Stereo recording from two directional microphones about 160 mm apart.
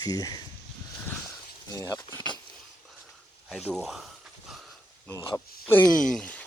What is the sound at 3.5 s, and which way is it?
Speech, centre (ahead or behind).